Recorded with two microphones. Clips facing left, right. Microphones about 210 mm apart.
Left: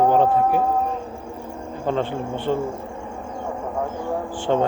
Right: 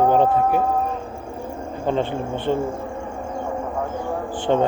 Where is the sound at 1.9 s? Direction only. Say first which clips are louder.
Right 1 dB; 20° right (ahead or behind).